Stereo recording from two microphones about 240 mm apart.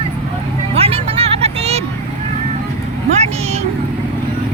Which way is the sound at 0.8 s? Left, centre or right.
Right.